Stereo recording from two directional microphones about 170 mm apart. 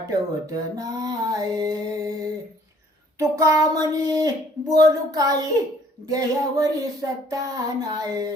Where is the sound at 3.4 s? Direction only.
20° right (ahead or behind).